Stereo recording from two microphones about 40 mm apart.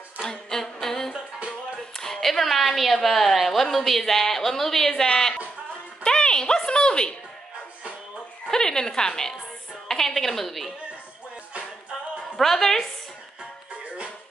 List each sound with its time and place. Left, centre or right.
0.2 s humming: centre
2.0 s a woman's voice: centre
8.5 s a woman's voice: centre
12.4 s a woman's voice: centre